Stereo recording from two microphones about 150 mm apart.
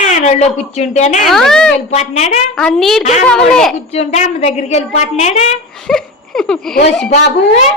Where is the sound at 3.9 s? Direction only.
45° left (ahead or behind).